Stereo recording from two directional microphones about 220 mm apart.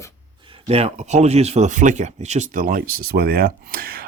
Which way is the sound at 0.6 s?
30° right (ahead or behind).